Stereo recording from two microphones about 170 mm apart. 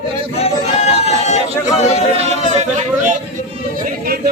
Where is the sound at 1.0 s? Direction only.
40° left (ahead or behind).